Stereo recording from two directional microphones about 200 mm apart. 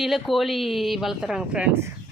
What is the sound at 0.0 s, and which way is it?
Speech, centre (ahead or behind).